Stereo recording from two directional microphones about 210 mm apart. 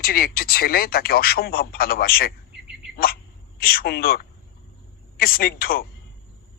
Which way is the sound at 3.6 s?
45° left (ahead or behind).